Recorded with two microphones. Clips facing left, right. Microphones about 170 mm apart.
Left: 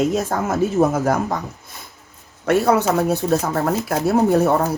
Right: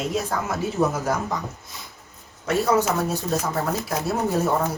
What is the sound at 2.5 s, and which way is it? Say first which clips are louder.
Speech: left 4 dB; 60° left (ahead or behind).